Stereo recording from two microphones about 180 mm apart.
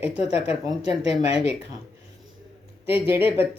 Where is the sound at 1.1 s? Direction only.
35° left (ahead or behind).